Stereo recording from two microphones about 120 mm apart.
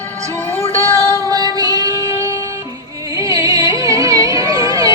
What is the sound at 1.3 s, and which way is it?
Music, 30° right (ahead or behind).